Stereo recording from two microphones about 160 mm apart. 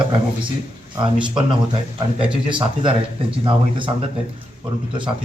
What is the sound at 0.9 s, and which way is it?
Speech, 30° right (ahead or behind).